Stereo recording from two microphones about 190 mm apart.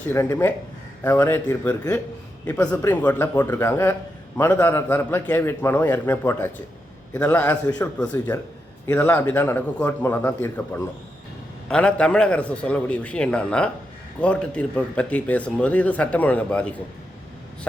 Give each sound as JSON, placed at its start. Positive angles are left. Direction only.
{"t": 0.1, "sound": "a man's voice", "side_deg": 15}